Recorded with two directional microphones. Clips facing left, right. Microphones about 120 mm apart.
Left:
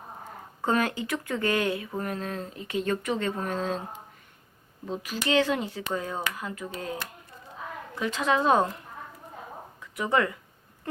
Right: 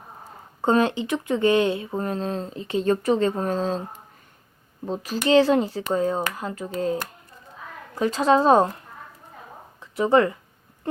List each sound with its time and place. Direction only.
0.6 s speech: 25° right (ahead or behind)
4.9 s speech: 35° right (ahead or behind)
9.8 s speech: 30° right (ahead or behind)